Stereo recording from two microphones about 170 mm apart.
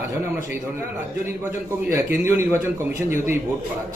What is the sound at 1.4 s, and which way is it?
A man's voice, 15° right (ahead or behind).